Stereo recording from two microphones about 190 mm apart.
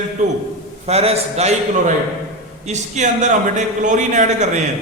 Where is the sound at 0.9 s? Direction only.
30° right (ahead or behind).